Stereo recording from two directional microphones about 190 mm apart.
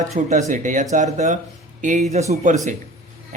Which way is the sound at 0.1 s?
40° right (ahead or behind).